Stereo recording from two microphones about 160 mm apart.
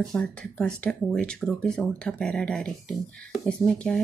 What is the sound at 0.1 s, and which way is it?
Speech, 5° left (ahead or behind).